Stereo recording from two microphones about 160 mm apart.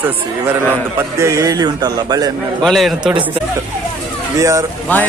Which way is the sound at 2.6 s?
Centre (ahead or behind).